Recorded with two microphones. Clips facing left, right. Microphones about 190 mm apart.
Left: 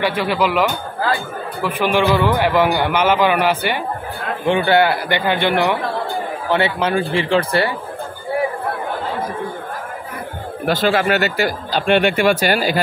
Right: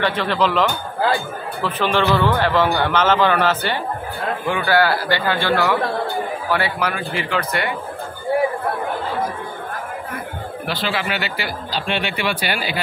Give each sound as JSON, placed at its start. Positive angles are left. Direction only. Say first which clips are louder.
{"t": 0.0, "sound": "a man's voice", "louder": "left 1 dB", "side_deg": 10}
{"t": 4.5, "sound": "a man's voice", "louder": "left 4 dB", "side_deg": 25}
{"t": 10.6, "sound": "speech", "louder": "left 8 dB", "side_deg": 45}